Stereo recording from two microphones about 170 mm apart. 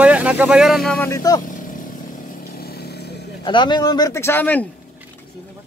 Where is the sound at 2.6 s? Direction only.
65° left (ahead or behind).